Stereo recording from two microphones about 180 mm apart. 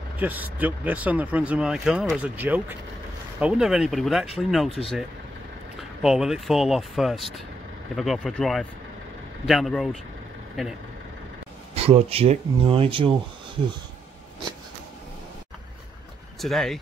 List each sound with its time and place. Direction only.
0.2 s speech: 10° right (ahead or behind)
5.8 s speech: centre (ahead or behind)
11.7 s speech: 35° right (ahead or behind)
16.3 s speech: centre (ahead or behind)